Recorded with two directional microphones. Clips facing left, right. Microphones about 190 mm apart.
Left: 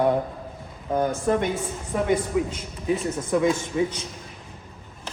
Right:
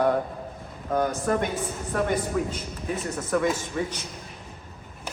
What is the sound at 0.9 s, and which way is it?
Speech, 25° left (ahead or behind).